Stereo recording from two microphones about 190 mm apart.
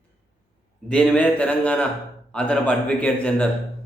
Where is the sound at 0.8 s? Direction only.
5° left (ahead or behind).